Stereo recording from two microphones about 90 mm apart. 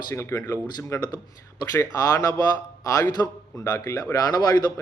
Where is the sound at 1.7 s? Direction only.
40° left (ahead or behind).